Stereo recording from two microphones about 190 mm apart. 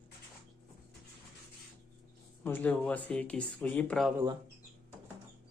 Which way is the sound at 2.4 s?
10° left (ahead or behind).